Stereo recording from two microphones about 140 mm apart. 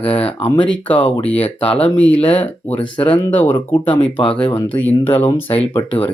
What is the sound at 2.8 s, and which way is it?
Speech, 35° left (ahead or behind).